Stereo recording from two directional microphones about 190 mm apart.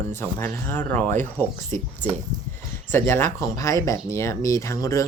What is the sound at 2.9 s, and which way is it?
Speech, 15° left (ahead or behind).